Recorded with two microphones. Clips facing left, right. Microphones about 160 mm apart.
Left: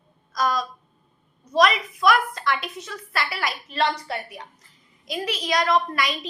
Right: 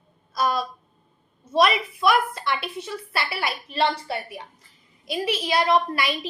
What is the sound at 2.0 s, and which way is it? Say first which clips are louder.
A woman's voice: left 1 dB; 25° right (ahead or behind).